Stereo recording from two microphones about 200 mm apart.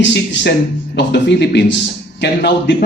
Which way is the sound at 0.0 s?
60° left (ahead or behind).